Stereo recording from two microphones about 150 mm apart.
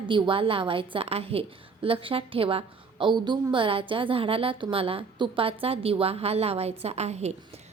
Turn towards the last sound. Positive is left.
turn(degrees=-45)  # may be behind; listen again after turning